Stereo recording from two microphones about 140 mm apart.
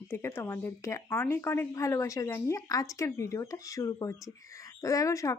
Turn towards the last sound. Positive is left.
turn(degrees=20)  # may be behind; listen again after turning